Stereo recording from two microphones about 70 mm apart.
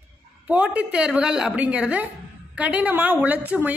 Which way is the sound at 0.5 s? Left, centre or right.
Right.